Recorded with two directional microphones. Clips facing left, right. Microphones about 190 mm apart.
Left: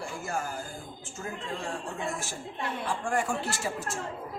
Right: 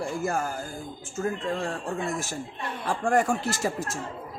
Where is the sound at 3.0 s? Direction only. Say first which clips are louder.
Right 8 dB; 45° right (ahead or behind).